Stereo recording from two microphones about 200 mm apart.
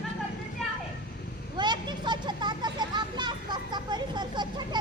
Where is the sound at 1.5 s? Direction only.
20° right (ahead or behind).